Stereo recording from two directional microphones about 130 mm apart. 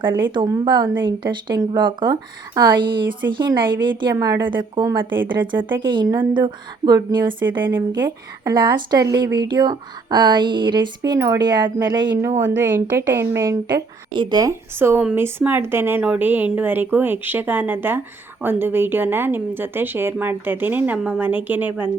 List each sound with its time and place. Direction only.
0.0 s speech: 40° right (ahead or behind)
12.7 s speech: 20° right (ahead or behind)
14.1 s speech: 35° right (ahead or behind)
14.8 s a woman's voice: 15° right (ahead or behind)